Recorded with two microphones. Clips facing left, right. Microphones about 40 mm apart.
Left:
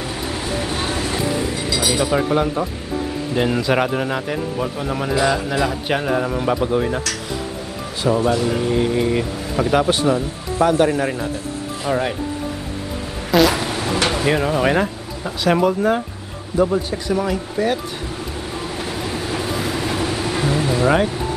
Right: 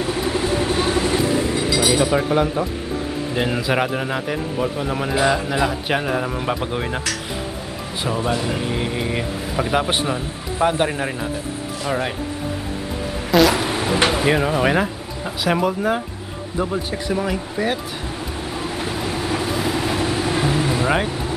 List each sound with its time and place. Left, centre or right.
0.1 s vehicle: centre
1.9 s a man's voice: centre
6.6 s speech: right
8.2 s speech: centre
11.8 s speech: centre
13.3 s a sound: centre
13.7 s a sound: centre
14.0 s speech: centre
16.6 s speech: centre
18.8 s vehicle: centre